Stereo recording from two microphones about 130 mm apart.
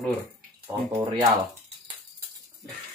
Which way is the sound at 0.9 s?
35° right (ahead or behind).